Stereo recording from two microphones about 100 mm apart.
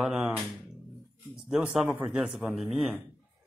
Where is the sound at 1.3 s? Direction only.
5° right (ahead or behind).